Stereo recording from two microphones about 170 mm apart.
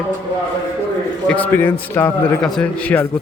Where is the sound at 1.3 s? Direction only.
10° left (ahead or behind).